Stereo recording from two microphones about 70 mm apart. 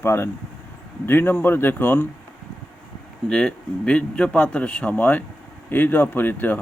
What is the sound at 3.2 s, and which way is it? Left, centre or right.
Speech, centre.